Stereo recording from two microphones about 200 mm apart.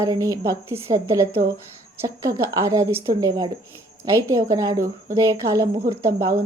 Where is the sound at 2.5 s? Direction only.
15° right (ahead or behind).